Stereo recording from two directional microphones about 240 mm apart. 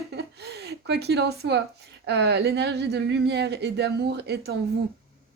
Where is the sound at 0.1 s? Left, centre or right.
Right.